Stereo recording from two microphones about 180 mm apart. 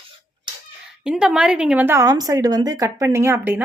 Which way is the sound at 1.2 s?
5° right (ahead or behind).